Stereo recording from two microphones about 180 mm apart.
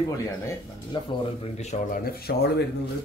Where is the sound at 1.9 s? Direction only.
60° left (ahead or behind).